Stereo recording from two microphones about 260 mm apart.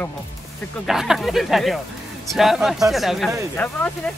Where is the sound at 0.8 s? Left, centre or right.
Centre.